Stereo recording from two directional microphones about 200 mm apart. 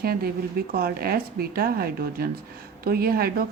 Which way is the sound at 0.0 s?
50° right (ahead or behind).